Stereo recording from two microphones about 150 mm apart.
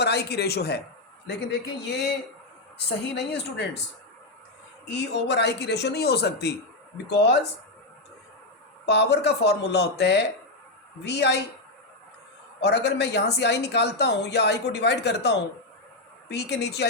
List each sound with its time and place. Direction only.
0.0 s a man's voice: 90° left
5.5 s speech: 90° left
8.9 s speech: 90° left
12.6 s speech: 90° left
16.3 s speech: 90° left